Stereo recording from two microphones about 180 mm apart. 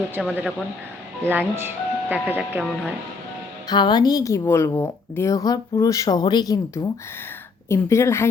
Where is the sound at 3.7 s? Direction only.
25° left (ahead or behind).